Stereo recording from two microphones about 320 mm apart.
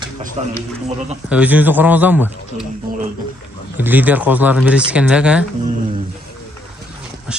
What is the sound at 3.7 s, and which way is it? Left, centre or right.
Speech, centre.